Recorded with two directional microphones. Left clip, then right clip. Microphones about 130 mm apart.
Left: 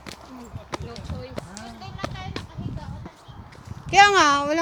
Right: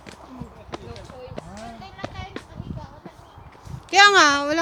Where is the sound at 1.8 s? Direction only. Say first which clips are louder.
Left 4 dB; 65° left (ahead or behind).